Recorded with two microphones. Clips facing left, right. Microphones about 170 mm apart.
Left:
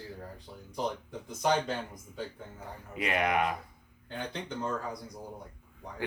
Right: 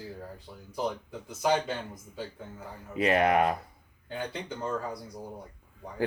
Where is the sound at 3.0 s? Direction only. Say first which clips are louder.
Right 5 dB; 35° right (ahead or behind).